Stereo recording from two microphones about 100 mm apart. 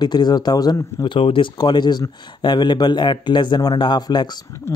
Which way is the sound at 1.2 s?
60° left (ahead or behind).